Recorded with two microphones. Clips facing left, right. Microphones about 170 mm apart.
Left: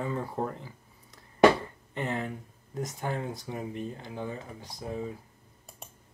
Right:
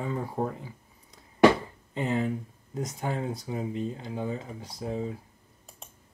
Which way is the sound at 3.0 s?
25° right (ahead or behind).